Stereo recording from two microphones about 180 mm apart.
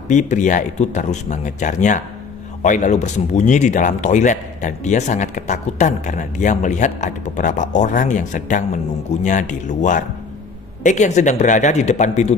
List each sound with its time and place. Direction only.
0.1 s a man's voice: 40° left (ahead or behind)